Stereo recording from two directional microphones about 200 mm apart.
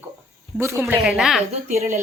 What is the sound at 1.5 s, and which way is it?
Speech, 35° right (ahead or behind).